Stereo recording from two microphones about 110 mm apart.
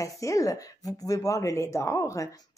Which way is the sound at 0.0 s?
30° left (ahead or behind).